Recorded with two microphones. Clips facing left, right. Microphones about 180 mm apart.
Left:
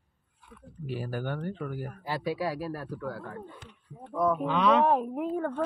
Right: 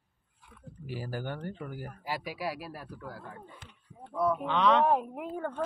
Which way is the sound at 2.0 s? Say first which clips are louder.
Left 5 dB; 10° right (ahead or behind).